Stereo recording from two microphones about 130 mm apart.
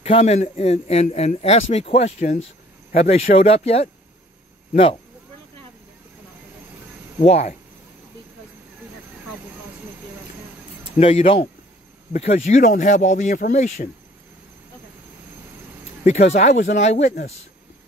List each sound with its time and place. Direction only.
0.0 s a man's voice: 55° left (ahead or behind)
7.2 s speech: 55° left (ahead or behind)
11.0 s a man's voice: 50° left (ahead or behind)
16.0 s speech: 65° left (ahead or behind)